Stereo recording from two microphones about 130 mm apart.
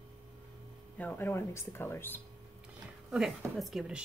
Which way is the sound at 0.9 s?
15° left (ahead or behind).